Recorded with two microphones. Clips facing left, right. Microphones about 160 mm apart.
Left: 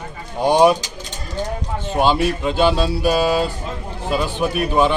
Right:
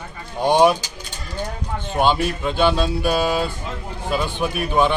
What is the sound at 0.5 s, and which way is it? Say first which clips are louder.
Speech: left 2 dB; 5° left (ahead or behind).